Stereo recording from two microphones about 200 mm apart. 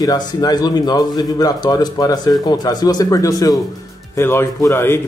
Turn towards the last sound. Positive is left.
turn(degrees=15)  # may be behind; listen again after turning